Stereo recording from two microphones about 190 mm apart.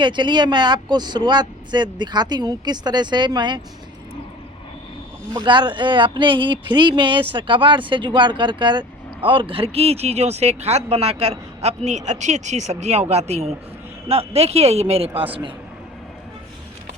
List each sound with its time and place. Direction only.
0.0 s speech: 25° right (ahead or behind)
5.3 s speech: 25° right (ahead or behind)